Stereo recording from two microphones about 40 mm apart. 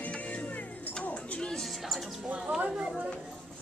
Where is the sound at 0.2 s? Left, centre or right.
Left.